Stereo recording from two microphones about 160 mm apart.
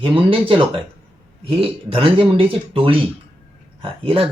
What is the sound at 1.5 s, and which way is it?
Speech, 35° right (ahead or behind).